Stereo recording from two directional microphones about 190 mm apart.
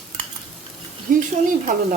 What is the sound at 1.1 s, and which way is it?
Speech, 45° right (ahead or behind).